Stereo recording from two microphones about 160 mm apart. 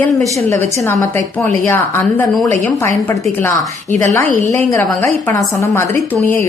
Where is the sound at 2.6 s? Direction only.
15° left (ahead or behind).